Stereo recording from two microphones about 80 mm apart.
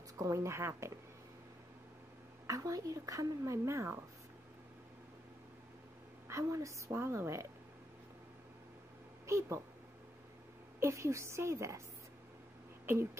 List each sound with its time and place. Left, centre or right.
0.2 s a woman's voice: right
2.4 s speech: right
6.2 s a woman's voice: right
9.2 s speech: right
10.8 s a woman's voice: right
12.8 s speech: right